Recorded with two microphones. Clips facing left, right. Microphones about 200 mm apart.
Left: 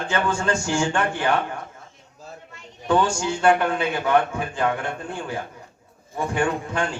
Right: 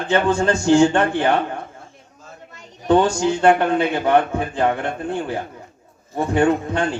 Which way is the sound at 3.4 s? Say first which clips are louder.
Right 3 dB; 35° right (ahead or behind).